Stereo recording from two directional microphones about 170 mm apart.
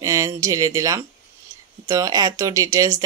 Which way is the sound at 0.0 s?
20° right (ahead or behind).